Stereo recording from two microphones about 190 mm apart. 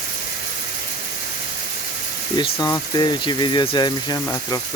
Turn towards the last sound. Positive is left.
turn(degrees=20)  # may be behind; listen again after turning